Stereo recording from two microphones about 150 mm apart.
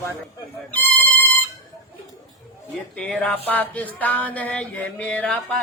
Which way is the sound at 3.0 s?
10° left (ahead or behind).